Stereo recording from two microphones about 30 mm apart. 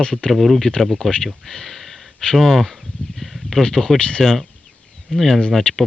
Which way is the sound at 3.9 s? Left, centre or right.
Left.